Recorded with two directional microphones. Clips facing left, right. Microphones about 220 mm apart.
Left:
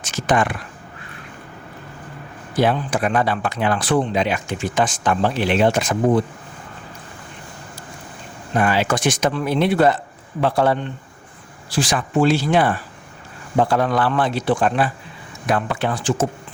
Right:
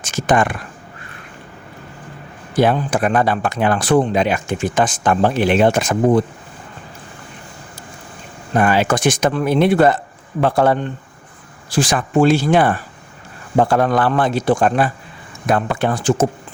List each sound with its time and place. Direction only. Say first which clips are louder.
0.0 s speech: right 3 dB; 50° right (ahead or behind)
2.6 s speech: right 3 dB; 50° right (ahead or behind)
8.5 s speech: right 3 dB; 50° right (ahead or behind)